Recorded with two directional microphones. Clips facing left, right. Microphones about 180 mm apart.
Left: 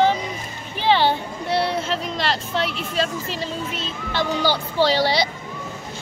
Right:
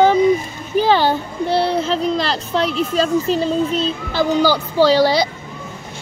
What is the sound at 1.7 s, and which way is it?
Speech, 35° right (ahead or behind).